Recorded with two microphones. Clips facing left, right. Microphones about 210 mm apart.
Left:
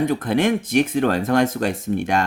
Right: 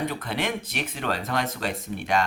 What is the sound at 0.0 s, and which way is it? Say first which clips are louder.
Speech: left 10 dB; 50° left (ahead or behind).